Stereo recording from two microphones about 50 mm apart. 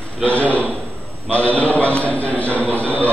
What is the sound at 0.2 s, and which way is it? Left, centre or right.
A man's voice, left.